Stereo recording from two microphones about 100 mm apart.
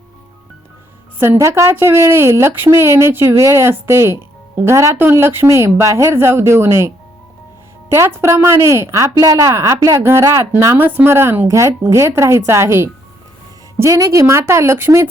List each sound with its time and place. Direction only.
1.2 s a woman's voice: 25° right (ahead or behind)